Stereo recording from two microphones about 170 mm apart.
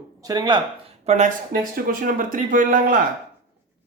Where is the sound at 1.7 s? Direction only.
55° right (ahead or behind).